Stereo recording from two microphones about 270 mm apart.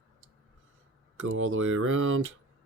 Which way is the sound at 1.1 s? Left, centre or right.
Right.